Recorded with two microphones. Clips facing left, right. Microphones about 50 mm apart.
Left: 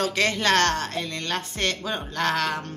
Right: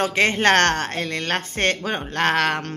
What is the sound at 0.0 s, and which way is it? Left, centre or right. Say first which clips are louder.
Speech: right 5 dB; right.